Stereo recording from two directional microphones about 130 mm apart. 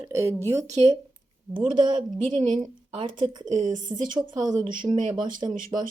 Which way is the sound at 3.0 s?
35° right (ahead or behind).